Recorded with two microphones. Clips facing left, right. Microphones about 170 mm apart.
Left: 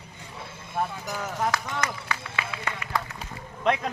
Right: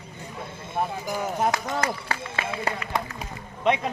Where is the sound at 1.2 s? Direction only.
25° right (ahead or behind).